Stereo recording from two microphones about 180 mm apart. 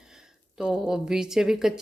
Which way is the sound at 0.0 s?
5° right (ahead or behind).